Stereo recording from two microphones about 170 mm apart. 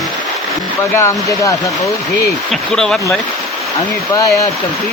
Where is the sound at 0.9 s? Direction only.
15° left (ahead or behind).